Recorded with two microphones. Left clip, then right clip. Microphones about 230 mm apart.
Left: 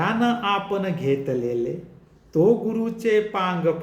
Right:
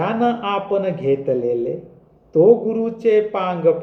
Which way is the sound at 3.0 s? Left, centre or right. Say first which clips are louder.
Right 4 dB; left.